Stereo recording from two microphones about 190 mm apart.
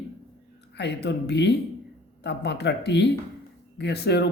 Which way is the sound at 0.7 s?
60° left (ahead or behind).